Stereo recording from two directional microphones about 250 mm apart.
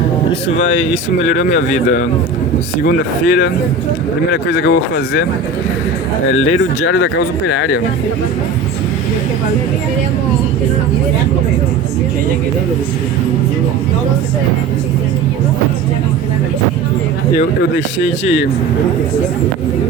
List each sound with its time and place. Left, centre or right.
0.4 s speech: left
6.8 s speech: left
17.3 s speech: left